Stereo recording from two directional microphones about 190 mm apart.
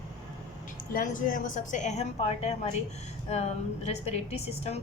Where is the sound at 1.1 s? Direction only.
45° left (ahead or behind).